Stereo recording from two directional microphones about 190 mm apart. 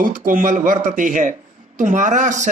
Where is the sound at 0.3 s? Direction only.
45° right (ahead or behind).